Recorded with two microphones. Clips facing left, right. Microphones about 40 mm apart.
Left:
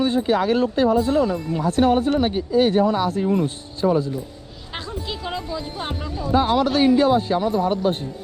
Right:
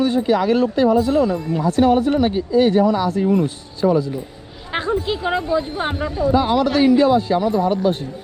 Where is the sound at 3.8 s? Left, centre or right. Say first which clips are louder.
Right 3 dB; right.